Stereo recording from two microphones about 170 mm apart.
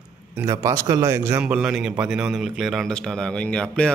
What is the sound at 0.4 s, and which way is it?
A man's voice, 15° right (ahead or behind).